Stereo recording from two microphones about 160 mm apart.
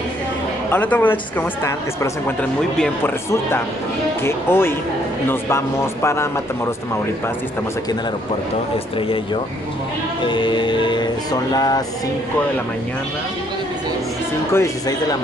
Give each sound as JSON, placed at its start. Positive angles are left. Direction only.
{"t": 0.7, "sound": "speech", "side_deg": 10}
{"t": 8.9, "sound": "music", "side_deg": 35}
{"t": 11.5, "sound": "speech", "side_deg": 25}
{"t": 14.5, "sound": "speech", "side_deg": 20}